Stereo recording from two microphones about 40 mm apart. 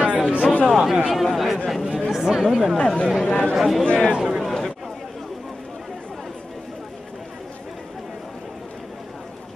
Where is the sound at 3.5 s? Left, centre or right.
Centre.